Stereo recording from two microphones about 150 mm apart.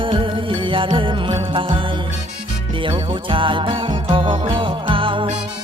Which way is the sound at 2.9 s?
35° right (ahead or behind).